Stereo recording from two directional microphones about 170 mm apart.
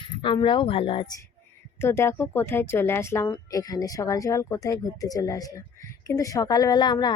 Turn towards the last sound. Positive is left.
turn(degrees=25)  # may be behind; listen again after turning